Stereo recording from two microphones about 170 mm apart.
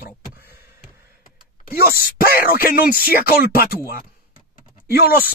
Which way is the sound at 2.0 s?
60° left (ahead or behind).